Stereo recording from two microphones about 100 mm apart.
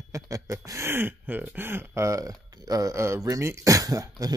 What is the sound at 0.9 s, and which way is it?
Speech, 20° right (ahead or behind).